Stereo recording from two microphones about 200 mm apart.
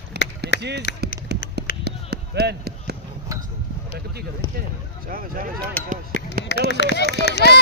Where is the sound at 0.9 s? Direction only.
60° left (ahead or behind).